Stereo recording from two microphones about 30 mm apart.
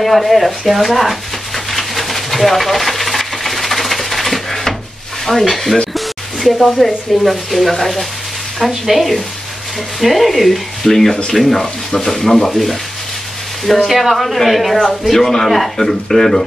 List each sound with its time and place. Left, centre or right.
0.0 s a sound: centre
5.2 s speech: centre
11.6 s speech: centre
12.1 s speech: centre
13.8 s speech: centre